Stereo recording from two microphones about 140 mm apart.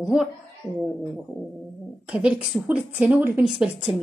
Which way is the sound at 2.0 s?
10° right (ahead or behind).